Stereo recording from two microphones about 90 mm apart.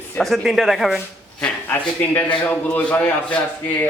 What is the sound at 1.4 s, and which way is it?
A man's voice, 20° left (ahead or behind).